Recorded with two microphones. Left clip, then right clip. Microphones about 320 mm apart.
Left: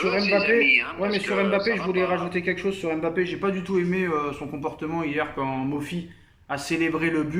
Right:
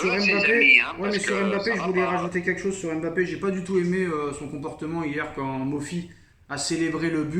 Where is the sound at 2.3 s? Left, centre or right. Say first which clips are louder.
Even; centre.